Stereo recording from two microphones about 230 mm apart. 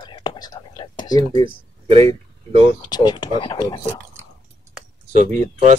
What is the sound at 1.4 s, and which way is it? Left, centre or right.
Speech, right.